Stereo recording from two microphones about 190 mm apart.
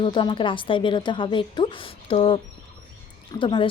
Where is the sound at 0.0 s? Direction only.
25° left (ahead or behind).